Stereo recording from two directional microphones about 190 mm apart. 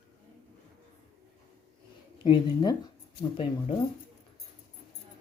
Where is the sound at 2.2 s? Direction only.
25° left (ahead or behind).